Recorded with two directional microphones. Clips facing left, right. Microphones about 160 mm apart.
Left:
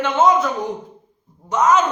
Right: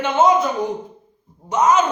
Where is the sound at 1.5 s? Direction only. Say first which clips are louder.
Even; 15° right (ahead or behind).